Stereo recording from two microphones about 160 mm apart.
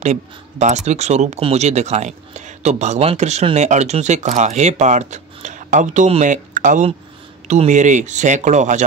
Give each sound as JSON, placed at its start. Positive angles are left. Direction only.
{"t": 0.0, "sound": "speech", "side_deg": -45}